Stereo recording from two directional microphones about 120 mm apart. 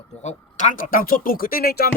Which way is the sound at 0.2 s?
80° left.